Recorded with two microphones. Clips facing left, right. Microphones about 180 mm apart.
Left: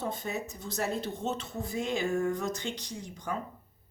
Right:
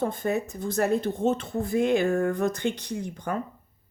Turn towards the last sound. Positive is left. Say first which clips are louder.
# right 6 dB
turn(degrees=-60)  # may be behind; listen again after turning